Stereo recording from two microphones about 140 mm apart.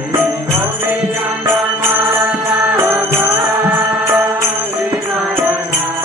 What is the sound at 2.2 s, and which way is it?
Music, 10° right (ahead or behind).